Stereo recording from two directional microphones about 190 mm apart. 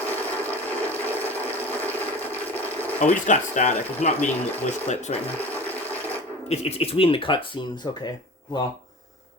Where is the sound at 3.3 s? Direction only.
35° left (ahead or behind).